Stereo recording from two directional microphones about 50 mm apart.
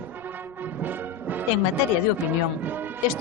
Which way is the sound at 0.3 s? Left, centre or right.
Right.